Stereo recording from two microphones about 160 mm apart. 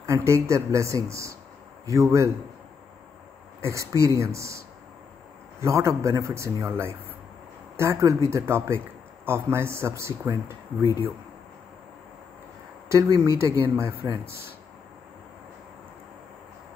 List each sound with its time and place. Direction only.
0.0 s speech: 15° right (ahead or behind)
3.6 s a man's voice: 20° right (ahead or behind)
12.8 s speech: 20° right (ahead or behind)